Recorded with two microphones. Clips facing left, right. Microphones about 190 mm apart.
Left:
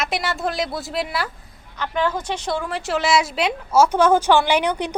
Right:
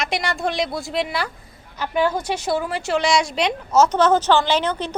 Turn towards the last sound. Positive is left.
turn(degrees=15)  # may be behind; listen again after turning